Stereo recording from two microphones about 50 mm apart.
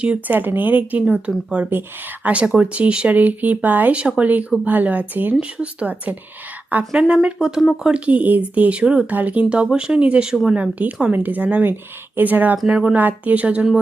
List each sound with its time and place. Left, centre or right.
0.3 s a woman's voice: right
1.3 s speech: centre
2.2 s a woman's voice: right
5.4 s speech: right
6.9 s speech: right
9.0 s a woman's voice: right
13.0 s speech: right